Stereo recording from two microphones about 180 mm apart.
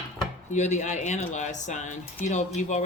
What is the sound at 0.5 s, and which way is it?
Speech, 40° left (ahead or behind).